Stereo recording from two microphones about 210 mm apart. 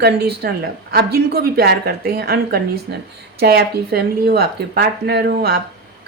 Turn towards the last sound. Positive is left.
turn(degrees=-50)  # may be behind; listen again after turning